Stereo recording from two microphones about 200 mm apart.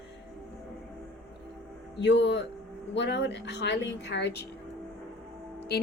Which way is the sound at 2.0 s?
60° left (ahead or behind).